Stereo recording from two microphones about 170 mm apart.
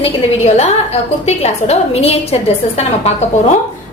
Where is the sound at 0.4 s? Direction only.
35° left (ahead or behind).